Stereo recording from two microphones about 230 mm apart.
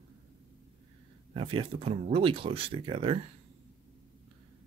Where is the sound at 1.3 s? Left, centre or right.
Right.